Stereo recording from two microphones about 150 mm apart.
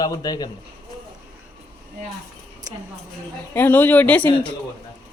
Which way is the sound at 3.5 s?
15° left (ahead or behind).